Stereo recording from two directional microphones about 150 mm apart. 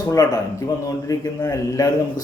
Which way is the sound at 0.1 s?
25° left (ahead or behind).